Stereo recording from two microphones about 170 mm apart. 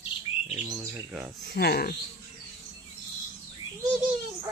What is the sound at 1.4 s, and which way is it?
Speech, 70° left (ahead or behind).